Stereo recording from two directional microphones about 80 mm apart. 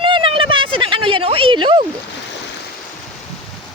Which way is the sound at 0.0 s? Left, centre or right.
Right.